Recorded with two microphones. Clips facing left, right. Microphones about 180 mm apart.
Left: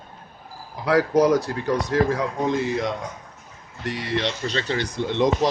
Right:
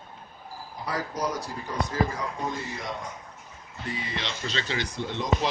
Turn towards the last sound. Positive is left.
turn(degrees=80)